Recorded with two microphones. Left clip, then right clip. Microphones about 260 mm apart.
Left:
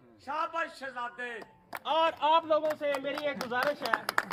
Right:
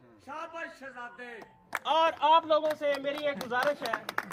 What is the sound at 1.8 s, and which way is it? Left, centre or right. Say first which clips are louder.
A man's voice: right 2 dB; centre.